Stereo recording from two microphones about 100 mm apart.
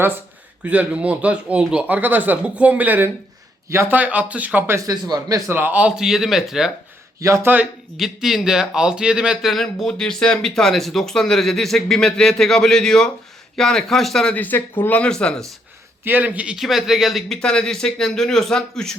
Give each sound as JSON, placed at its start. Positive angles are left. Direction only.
{"t": 0.6, "sound": "speech", "side_deg": -15}
{"t": 3.7, "sound": "speech", "side_deg": -25}
{"t": 3.9, "sound": "speech", "side_deg": -15}
{"t": 4.9, "sound": "speech", "side_deg": -40}
{"t": 5.5, "sound": "speech", "side_deg": -20}
{"t": 7.2, "sound": "speech", "side_deg": -30}
{"t": 7.9, "sound": "speech", "side_deg": 0}
{"t": 16.0, "sound": "speech", "side_deg": -15}
{"t": 16.6, "sound": "speech", "side_deg": 0}